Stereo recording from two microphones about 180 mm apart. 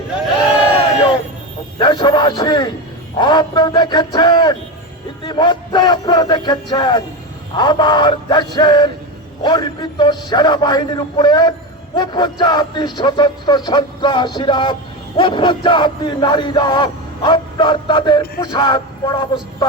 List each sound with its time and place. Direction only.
1.8 s a man's voice: 25° left (ahead or behind)